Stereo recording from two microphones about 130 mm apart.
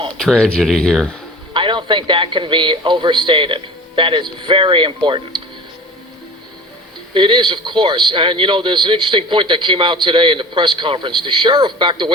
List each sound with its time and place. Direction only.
0.1 s speech: 5° left (ahead or behind)
1.5 s speech: 40° right (ahead or behind)
7.1 s speech: 40° right (ahead or behind)